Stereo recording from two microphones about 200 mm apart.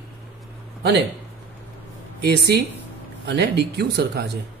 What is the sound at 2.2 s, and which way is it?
Speech, 55° right (ahead or behind).